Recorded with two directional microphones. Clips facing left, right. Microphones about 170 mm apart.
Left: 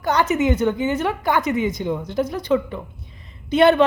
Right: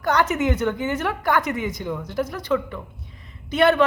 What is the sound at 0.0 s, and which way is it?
A man's voice, 10° left (ahead or behind).